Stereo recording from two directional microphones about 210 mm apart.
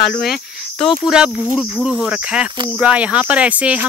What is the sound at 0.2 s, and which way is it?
Speech, centre (ahead or behind).